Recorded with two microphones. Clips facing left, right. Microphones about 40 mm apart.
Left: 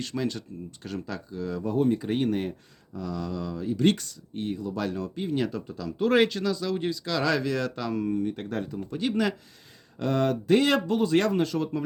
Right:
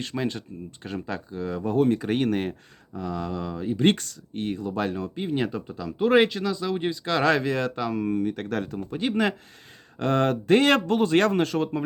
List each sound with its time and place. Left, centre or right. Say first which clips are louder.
0.2 s speech: right 1 dB; right
1.6 s speech: right 3 dB; right
2.9 s speech: right 2 dB; right
3.9 s speech: right 2 dB; right
4.7 s speech: right 3 dB; right
7.8 s speech: right 2 dB; centre
8.1 s speech: right 2 dB; right
8.9 s speech: right 2 dB; right
10.0 s speech: right 2 dB; right